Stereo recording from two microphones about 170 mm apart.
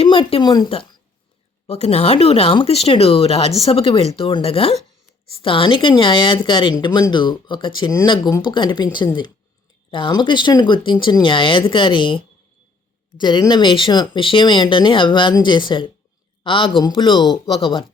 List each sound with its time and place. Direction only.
0.0 s speech: 35° left (ahead or behind)
1.6 s speech: 40° left (ahead or behind)